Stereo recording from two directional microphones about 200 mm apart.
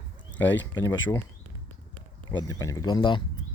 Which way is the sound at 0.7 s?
15° left (ahead or behind).